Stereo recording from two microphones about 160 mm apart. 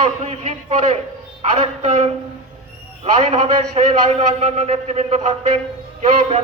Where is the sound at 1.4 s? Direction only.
40° right (ahead or behind).